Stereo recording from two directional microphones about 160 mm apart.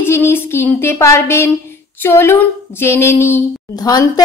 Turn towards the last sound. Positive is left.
turn(degrees=25)  # may be behind; listen again after turning